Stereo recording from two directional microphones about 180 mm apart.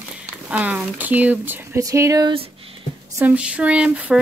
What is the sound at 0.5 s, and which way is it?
Speech, 5° right (ahead or behind).